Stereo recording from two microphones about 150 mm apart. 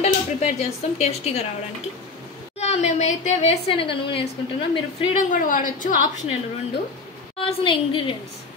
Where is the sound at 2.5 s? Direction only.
45° left (ahead or behind).